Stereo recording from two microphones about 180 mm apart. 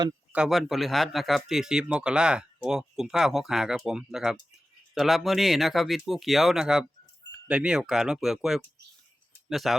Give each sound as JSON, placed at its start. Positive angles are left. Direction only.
{"t": 0.3, "sound": "speech", "side_deg": 0}